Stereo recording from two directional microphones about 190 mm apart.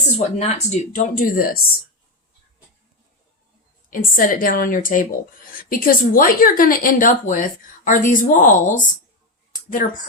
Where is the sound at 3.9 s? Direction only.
45° left (ahead or behind).